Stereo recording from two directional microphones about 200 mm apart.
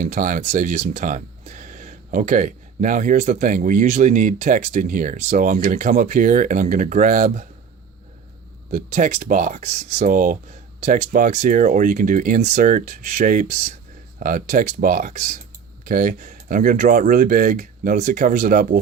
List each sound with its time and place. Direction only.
0.0 s speech: 40° right (ahead or behind)
8.7 s speech: 40° right (ahead or behind)